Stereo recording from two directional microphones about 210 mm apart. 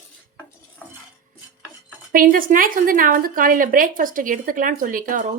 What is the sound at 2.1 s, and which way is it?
Speech, 40° right (ahead or behind).